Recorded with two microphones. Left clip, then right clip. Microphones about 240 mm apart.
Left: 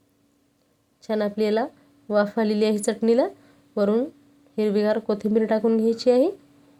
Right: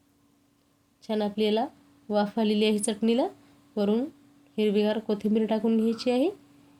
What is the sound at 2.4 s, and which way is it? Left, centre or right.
Speech, left.